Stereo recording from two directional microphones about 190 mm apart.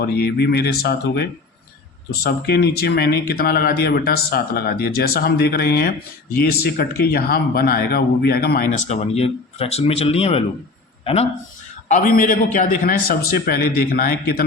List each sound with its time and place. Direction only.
0.0 s a man's voice: 55° left (ahead or behind)
8.9 s a man's voice: 30° left (ahead or behind); by 14.4 s 50° left (ahead or behind)